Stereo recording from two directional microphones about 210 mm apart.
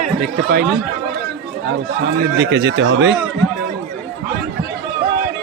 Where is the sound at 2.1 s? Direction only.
55° right (ahead or behind).